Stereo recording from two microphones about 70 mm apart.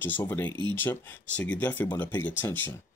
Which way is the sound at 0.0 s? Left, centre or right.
Left.